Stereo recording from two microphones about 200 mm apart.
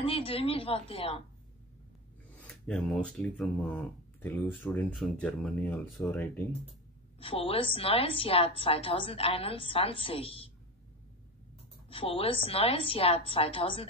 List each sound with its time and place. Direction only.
0.0 s a woman's voice: 30° left (ahead or behind)
2.4 s speech: 5° left (ahead or behind)
7.2 s a woman's voice: 30° left (ahead or behind)
11.9 s a woman's voice: 30° left (ahead or behind)